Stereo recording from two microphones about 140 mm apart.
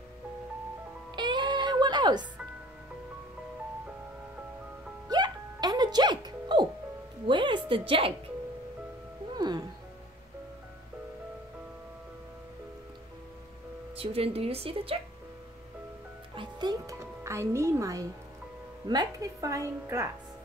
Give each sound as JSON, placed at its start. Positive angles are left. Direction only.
{"t": 1.1, "sound": "music", "side_deg": -30}
{"t": 5.1, "sound": "music", "side_deg": -30}
{"t": 9.3, "sound": "music", "side_deg": -30}
{"t": 13.9, "sound": "a woman's voice", "side_deg": -45}
{"t": 16.3, "sound": "music", "side_deg": -30}
{"t": 18.9, "sound": "a woman's voice", "side_deg": -25}